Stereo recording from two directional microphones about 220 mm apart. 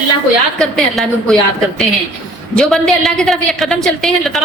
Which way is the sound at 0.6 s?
Centre (ahead or behind).